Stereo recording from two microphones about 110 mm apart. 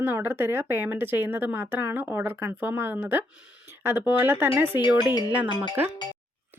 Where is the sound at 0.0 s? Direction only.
20° right (ahead or behind).